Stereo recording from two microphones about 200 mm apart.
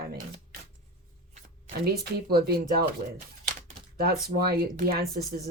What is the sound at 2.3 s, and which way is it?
Speech, 50° right (ahead or behind).